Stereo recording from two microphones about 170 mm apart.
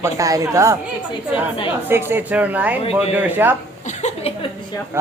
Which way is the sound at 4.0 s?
45° left (ahead or behind).